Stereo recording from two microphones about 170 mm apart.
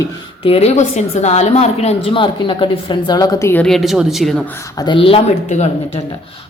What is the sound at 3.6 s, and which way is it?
Speech, centre (ahead or behind).